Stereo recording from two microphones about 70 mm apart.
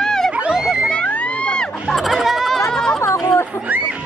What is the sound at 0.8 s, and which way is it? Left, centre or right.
Crowd, centre.